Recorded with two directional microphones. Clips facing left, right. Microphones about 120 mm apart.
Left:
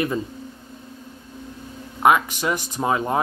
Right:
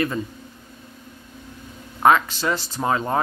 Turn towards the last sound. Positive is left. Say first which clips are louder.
# even
turn(degrees=10)  # may be behind; listen again after turning